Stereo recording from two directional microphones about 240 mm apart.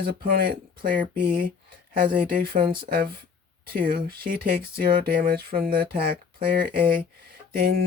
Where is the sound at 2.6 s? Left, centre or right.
Right.